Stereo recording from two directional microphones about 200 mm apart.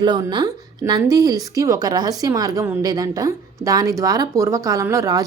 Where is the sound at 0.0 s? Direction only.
20° right (ahead or behind).